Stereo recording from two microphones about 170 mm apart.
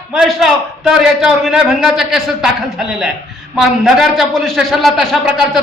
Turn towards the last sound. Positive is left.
turn(degrees=0)  # may be behind; listen again after turning